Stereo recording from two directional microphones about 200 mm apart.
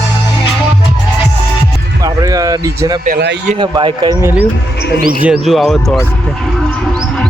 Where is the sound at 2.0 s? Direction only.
20° right (ahead or behind).